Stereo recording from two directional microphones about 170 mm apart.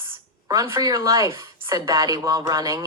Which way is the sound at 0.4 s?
20° right (ahead or behind).